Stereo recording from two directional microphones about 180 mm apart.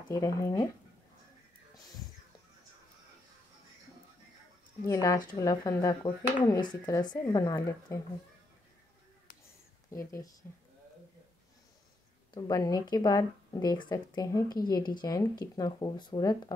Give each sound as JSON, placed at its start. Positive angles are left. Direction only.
{"t": 0.1, "sound": "speech", "side_deg": 20}
{"t": 4.8, "sound": "speech", "side_deg": 15}
{"t": 9.8, "sound": "speech", "side_deg": 15}
{"t": 12.4, "sound": "speech", "side_deg": 20}